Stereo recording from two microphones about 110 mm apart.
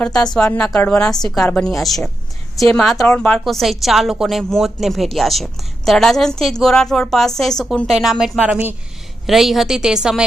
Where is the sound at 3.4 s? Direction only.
Centre (ahead or behind).